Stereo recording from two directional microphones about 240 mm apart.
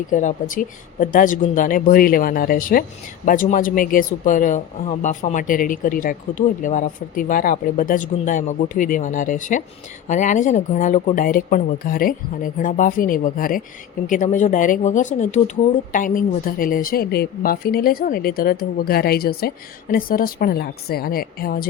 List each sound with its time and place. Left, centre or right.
0.1 s speech: left